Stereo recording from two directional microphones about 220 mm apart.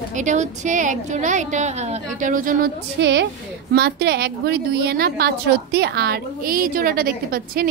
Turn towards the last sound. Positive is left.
turn(degrees=-40)  # may be behind; listen again after turning